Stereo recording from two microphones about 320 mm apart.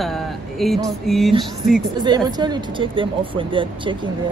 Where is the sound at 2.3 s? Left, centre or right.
Centre.